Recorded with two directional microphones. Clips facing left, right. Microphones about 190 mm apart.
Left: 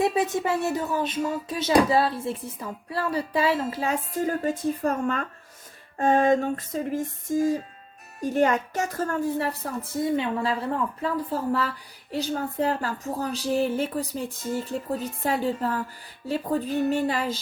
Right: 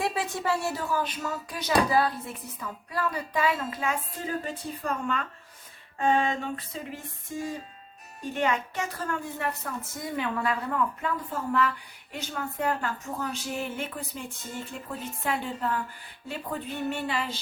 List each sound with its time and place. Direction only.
0.0 s speech: 20° left (ahead or behind)
4.3 s music: 45° left (ahead or behind)
8.2 s speech: 45° left (ahead or behind)